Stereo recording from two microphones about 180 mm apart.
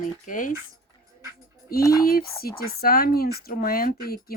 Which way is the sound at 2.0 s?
55° left (ahead or behind).